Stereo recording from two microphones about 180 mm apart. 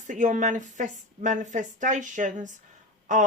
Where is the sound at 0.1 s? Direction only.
45° right (ahead or behind).